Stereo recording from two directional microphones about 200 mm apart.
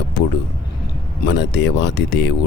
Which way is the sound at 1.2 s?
60° left (ahead or behind).